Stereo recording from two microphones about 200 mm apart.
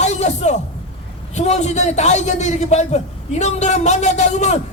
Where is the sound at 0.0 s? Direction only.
35° left (ahead or behind).